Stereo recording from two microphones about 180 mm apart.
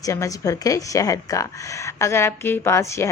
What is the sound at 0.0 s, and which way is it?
A woman's voice, 20° left (ahead or behind).